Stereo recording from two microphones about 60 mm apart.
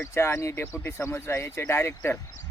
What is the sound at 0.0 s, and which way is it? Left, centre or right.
Speech, left.